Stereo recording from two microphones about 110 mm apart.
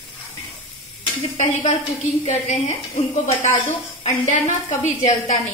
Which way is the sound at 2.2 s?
90° left.